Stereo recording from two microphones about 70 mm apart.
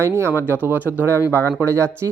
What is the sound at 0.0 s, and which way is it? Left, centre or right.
Speech, right.